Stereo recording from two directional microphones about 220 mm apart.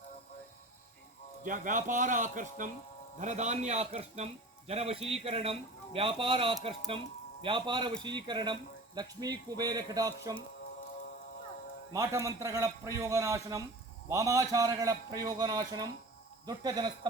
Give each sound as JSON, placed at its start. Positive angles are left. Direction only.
{"t": 1.5, "sound": "a man's voice", "side_deg": -35}
{"t": 11.9, "sound": "a man's voice", "side_deg": -15}